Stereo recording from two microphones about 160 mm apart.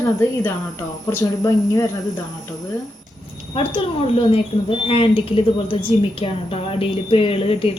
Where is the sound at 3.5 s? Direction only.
35° left (ahead or behind).